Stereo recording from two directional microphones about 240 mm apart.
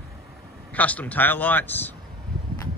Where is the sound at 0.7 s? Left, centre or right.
Centre.